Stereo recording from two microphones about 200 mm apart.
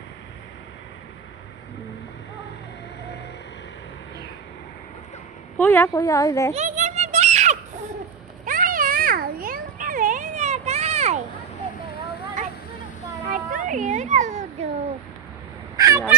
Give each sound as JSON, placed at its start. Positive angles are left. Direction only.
{"t": 5.6, "sound": "a woman's voice", "side_deg": 10}
{"t": 6.5, "sound": "a sound", "side_deg": -35}
{"t": 13.3, "sound": "children playing", "side_deg": -40}
{"t": 15.7, "sound": "fowl", "side_deg": -15}